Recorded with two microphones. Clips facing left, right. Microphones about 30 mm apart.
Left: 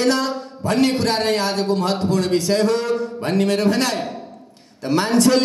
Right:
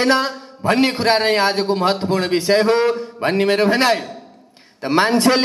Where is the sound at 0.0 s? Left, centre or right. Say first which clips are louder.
Right 2 dB; right.